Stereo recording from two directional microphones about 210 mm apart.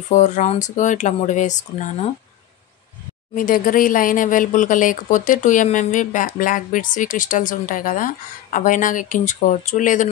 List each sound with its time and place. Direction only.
0.1 s speech: 35° left (ahead or behind)
3.3 s speech: 40° left (ahead or behind)